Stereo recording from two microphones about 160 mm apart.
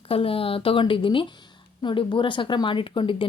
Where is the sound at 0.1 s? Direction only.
35° left (ahead or behind).